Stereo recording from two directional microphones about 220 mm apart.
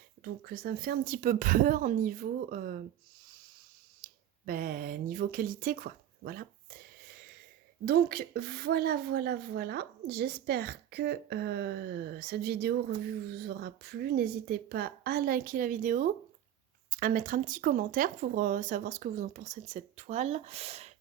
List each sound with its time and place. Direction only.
0.2 s speech: 45° right (ahead or behind)
4.0 s a sound: 40° right (ahead or behind)
7.9 s speech: 45° right (ahead or behind); by 20.9 s 30° right (ahead or behind)